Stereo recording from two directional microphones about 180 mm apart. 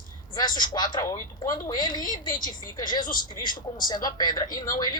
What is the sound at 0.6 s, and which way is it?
A man's voice, 20° left (ahead or behind).